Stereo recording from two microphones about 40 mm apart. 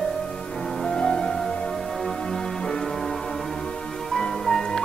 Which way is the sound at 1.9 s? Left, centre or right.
Centre.